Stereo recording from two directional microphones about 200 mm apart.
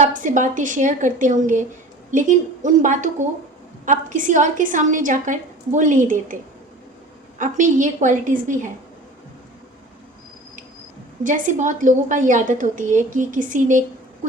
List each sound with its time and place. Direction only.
0.0 s a woman's voice: 40° right (ahead or behind)
7.3 s a woman's voice: 40° right (ahead or behind)
11.2 s a woman's voice: 40° right (ahead or behind)